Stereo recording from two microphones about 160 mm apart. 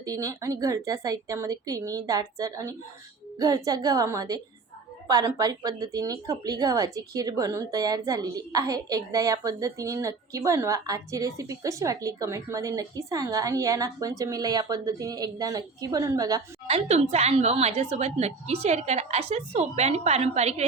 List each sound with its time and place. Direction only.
0.0 s speech: 20° right (ahead or behind)
16.6 s a woman's voice: 40° right (ahead or behind)